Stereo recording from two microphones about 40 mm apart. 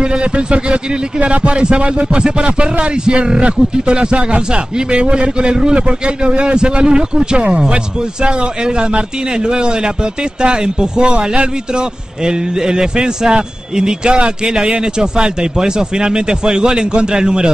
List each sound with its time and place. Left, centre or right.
0.0 s a man's voice: right